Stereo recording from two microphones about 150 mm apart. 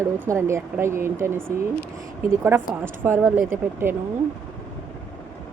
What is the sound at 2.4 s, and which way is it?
Speech, 15° right (ahead or behind).